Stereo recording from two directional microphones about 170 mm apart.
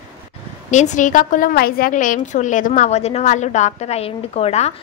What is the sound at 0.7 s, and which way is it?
A woman's voice, 45° left (ahead or behind).